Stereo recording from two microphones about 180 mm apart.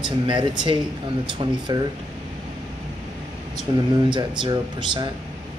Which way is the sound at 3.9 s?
25° right (ahead or behind).